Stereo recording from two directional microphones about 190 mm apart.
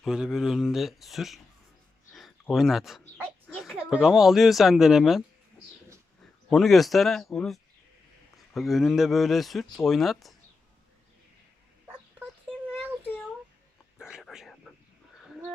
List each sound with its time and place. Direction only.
0.0 s speech: 5° right (ahead or behind)
2.1 s a sound: centre (ahead or behind)
3.5 s speech: centre (ahead or behind)
6.5 s speech: centre (ahead or behind)
14.0 s whispering: centre (ahead or behind)